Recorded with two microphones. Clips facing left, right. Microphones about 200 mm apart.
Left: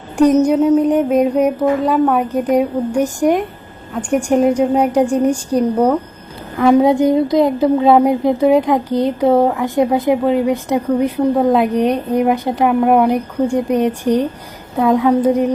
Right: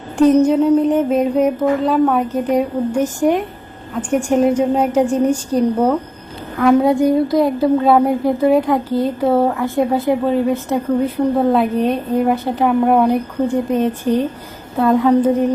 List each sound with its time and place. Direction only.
0.4 s a woman's voice: 10° left (ahead or behind)
6.8 s a woman's voice: 20° left (ahead or behind)